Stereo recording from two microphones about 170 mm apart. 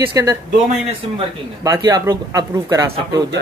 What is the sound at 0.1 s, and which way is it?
Speech, 20° right (ahead or behind).